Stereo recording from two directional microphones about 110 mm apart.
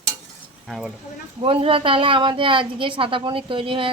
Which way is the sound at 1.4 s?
55° right (ahead or behind).